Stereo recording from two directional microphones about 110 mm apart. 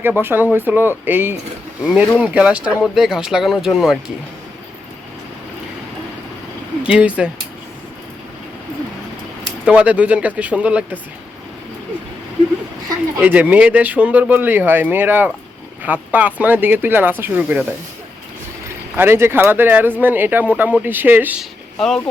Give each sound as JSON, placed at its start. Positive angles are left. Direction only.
{"t": 0.0, "sound": "speech", "side_deg": -20}
{"t": 6.8, "sound": "speech", "side_deg": -10}
{"t": 9.6, "sound": "speech", "side_deg": -10}
{"t": 13.1, "sound": "speech", "side_deg": -15}
{"t": 18.9, "sound": "speech", "side_deg": -20}
{"t": 21.8, "sound": "speech", "side_deg": 5}